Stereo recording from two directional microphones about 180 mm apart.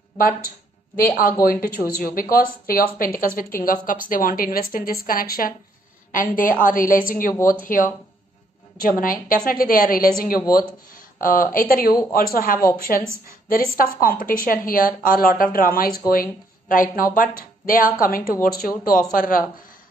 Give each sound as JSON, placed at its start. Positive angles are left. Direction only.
{"t": 0.9, "sound": "speech", "side_deg": 50}
{"t": 9.0, "sound": "speech", "side_deg": 50}